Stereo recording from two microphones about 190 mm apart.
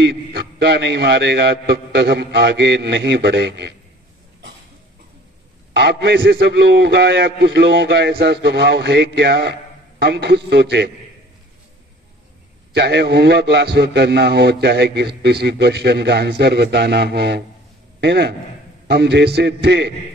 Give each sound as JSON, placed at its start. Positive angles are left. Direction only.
{"t": 0.0, "sound": "a man's voice", "side_deg": -65}
{"t": 5.7, "sound": "a man's voice", "side_deg": -65}
{"t": 12.7, "sound": "a man's voice", "side_deg": -60}